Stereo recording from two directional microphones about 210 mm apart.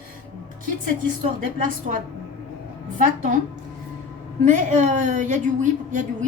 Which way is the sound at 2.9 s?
40° right (ahead or behind).